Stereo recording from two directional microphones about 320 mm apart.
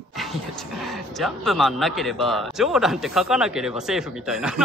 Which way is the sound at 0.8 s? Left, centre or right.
Centre.